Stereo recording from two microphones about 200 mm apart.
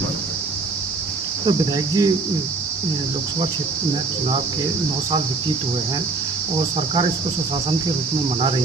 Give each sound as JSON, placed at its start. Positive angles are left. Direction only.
{"t": 1.5, "sound": "speech", "side_deg": -20}